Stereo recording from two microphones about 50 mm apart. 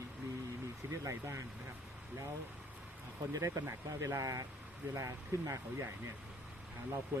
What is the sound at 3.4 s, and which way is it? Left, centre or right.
Speech, right.